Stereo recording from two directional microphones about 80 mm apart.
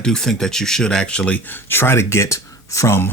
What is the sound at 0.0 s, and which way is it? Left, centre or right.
Speech, centre.